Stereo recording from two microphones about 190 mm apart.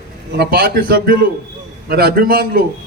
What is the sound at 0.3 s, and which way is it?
A man's voice, 50° right (ahead or behind).